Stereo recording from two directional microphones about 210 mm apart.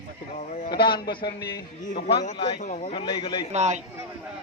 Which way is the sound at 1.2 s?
50° left (ahead or behind).